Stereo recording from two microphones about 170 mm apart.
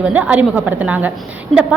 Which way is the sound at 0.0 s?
5° right (ahead or behind).